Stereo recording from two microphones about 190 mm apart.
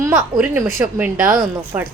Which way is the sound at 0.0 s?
10° right (ahead or behind).